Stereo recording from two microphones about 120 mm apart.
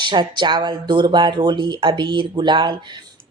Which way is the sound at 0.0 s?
40° right (ahead or behind).